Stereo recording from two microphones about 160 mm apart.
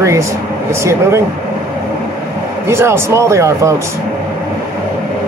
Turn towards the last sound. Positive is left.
turn(degrees=-20)  # may be behind; listen again after turning